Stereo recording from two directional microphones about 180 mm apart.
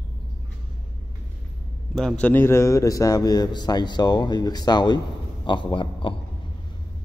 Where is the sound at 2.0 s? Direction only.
5° left (ahead or behind); by 6.1 s 30° left (ahead or behind).